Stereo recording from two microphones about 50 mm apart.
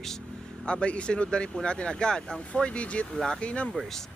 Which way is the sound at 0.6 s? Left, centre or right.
Left.